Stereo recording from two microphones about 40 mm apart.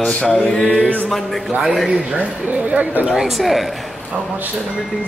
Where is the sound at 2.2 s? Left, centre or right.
Right.